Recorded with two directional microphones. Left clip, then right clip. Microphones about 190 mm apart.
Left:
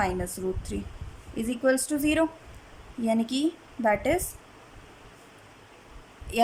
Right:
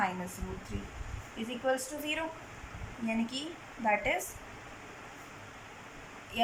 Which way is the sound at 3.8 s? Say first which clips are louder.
Left 5 dB; 50° left (ahead or behind).